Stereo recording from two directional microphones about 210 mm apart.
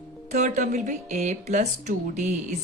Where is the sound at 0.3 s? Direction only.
35° right (ahead or behind).